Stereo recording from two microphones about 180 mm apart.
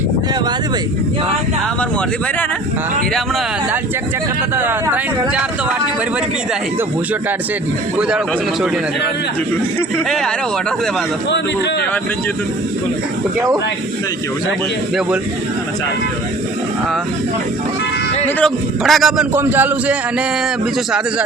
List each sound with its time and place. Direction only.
4.5 s speech: 10° right (ahead or behind)
7.9 s a man's voice: 5° right (ahead or behind)
10.1 s a man's voice: centre (ahead or behind)
11.3 s a man's voice: 70° left (ahead or behind)
18.3 s a man's voice: centre (ahead or behind)